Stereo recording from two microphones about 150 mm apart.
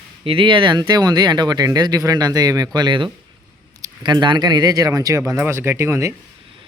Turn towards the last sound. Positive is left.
turn(degrees=-20)  # may be behind; listen again after turning